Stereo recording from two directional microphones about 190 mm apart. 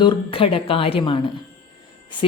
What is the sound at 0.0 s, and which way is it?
A woman's voice, 25° left (ahead or behind).